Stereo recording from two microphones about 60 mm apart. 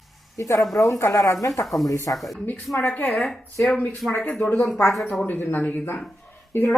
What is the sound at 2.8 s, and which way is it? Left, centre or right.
Speech, left.